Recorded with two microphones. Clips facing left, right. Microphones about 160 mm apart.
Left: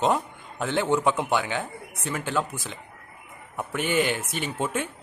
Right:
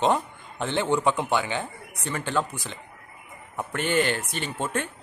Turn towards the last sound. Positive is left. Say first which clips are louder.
# left 1 dB
turn(degrees=10)  # may be behind; listen again after turning